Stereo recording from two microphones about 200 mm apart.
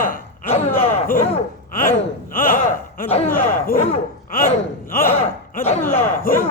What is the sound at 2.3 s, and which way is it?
Speech, 45° left (ahead or behind).